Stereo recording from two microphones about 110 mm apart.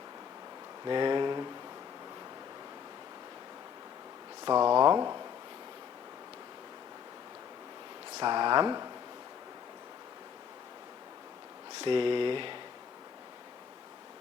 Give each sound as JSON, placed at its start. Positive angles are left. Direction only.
{"t": 0.9, "sound": "speech", "side_deg": -45}
{"t": 4.4, "sound": "speech", "side_deg": -40}
{"t": 8.2, "sound": "speech", "side_deg": -45}
{"t": 11.8, "sound": "speech", "side_deg": -50}